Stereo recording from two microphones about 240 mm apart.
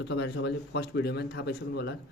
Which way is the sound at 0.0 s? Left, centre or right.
Left.